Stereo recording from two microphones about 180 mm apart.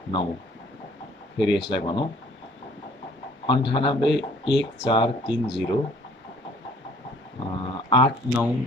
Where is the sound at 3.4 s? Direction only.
25° left (ahead or behind).